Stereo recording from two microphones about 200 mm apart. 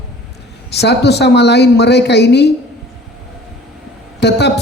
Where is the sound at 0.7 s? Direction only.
55° left (ahead or behind).